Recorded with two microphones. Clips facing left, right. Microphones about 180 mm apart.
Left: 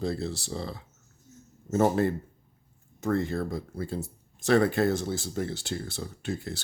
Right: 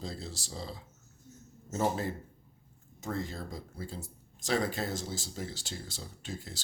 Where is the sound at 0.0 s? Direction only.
65° left (ahead or behind).